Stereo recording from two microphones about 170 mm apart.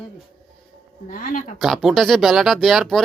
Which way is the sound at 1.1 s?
50° left (ahead or behind).